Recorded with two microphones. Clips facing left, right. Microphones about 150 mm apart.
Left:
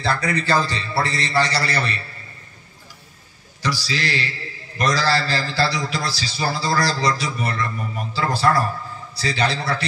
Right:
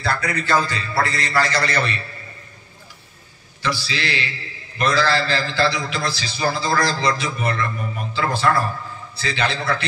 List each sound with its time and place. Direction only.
0.0 s a man's voice: 30° left (ahead or behind)
3.6 s a man's voice: 40° left (ahead or behind)